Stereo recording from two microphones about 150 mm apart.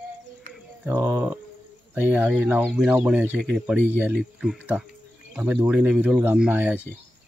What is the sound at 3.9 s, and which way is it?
Speech, 10° right (ahead or behind).